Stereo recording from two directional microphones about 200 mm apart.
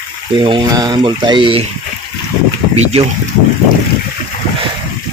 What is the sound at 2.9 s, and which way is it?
Speech, 30° right (ahead or behind).